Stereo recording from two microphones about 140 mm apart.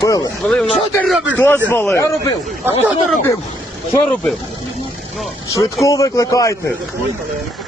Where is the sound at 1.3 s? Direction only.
15° left (ahead or behind).